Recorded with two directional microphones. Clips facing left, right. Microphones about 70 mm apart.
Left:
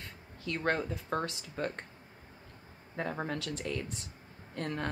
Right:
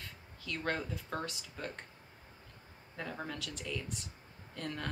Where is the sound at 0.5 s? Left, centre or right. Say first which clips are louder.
Left 5 dB; left.